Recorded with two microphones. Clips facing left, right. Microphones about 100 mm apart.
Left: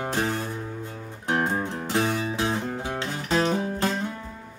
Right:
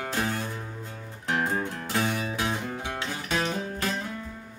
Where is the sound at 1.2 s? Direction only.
30° left (ahead or behind).